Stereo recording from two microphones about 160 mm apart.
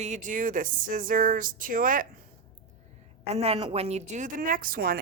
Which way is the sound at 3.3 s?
40° right (ahead or behind).